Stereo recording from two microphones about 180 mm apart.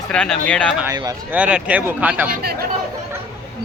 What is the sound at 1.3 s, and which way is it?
Speech, 5° right (ahead or behind).